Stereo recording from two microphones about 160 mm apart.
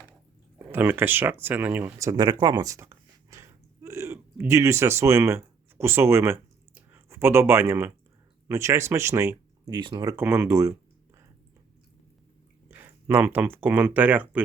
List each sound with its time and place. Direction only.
0.6 s speech: 15° right (ahead or behind)
9.7 s speech: 30° right (ahead or behind)
12.8 s speech: 10° right (ahead or behind)